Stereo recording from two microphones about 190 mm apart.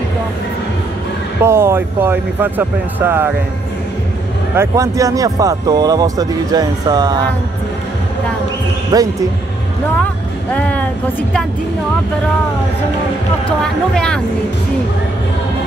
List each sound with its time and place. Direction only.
1.4 s speech: 15° right (ahead or behind)
4.6 s speech: 15° right (ahead or behind)
8.9 s speech: 20° right (ahead or behind)
10.5 s speech: 5° left (ahead or behind)
13.5 s speech: 5° left (ahead or behind)